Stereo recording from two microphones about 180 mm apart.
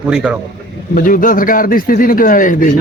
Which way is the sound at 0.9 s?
50° left (ahead or behind).